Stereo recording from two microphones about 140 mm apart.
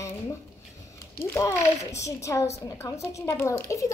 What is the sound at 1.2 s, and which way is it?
A child's voice, 20° left (ahead or behind).